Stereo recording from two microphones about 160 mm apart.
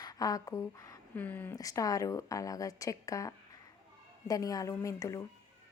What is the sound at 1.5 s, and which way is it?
A woman's voice, 20° left (ahead or behind).